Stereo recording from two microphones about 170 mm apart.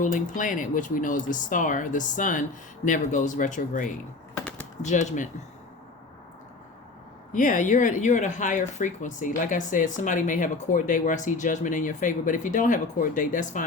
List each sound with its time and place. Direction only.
0.0 s speech: 50° left (ahead or behind)
7.3 s speech: 50° left (ahead or behind)